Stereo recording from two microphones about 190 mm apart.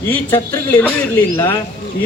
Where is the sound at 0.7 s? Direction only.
10° left (ahead or behind).